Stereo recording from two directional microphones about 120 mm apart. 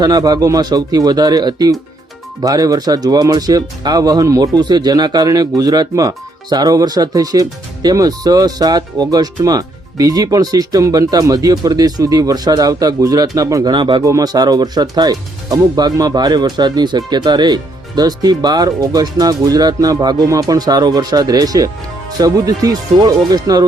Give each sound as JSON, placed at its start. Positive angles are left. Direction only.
{"t": 0.0, "sound": "speech", "side_deg": -35}
{"t": 13.7, "sound": "speech", "side_deg": -40}
{"t": 14.0, "sound": "speech", "side_deg": -30}